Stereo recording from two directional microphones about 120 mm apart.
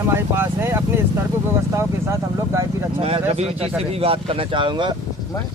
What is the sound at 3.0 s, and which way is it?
Speech, 60° right (ahead or behind).